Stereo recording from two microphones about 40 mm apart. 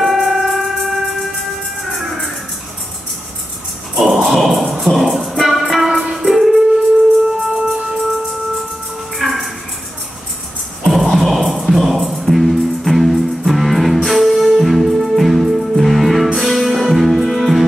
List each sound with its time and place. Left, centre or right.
0.0 s train: centre
1.9 s music: centre
4.0 s music: centre
7.2 s music: centre
9.2 s a sound: centre
10.8 s music: centre